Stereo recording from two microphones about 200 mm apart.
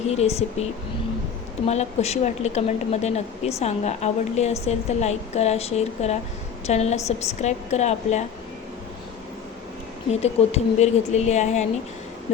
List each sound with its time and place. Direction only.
0.1 s a woman's voice: 30° left (ahead or behind)
1.6 s a woman's voice: 30° left (ahead or behind)
10.1 s a woman's voice: 30° left (ahead or behind)